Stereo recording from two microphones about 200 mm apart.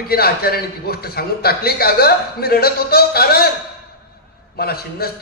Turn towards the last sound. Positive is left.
turn(degrees=50)  # may be behind; listen again after turning